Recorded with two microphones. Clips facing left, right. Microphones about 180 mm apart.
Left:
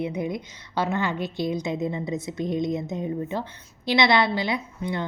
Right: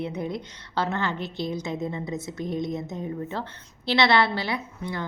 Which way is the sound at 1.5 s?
15° left (ahead or behind).